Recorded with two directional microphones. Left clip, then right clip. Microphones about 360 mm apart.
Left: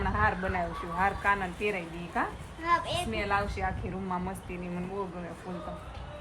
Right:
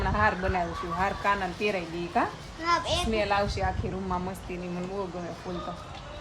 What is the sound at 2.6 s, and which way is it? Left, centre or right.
Speech, right.